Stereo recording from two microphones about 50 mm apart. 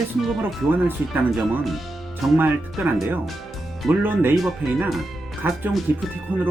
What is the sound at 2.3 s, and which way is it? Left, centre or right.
Speech, right.